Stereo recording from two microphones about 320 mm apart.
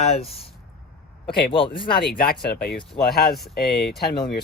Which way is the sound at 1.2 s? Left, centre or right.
Left.